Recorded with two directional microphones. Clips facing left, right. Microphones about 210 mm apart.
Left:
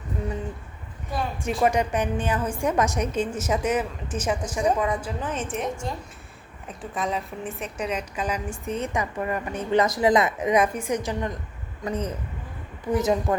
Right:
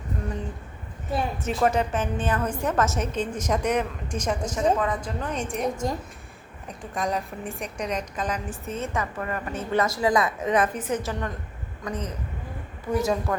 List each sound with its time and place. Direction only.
1.5 s a woman's voice: 10° left (ahead or behind)
6.9 s a woman's voice: centre (ahead or behind)
11.9 s speech: 30° left (ahead or behind)
12.9 s a woman's voice: 20° left (ahead or behind)